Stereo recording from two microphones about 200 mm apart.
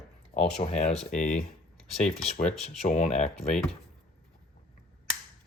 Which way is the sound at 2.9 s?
35° left (ahead or behind).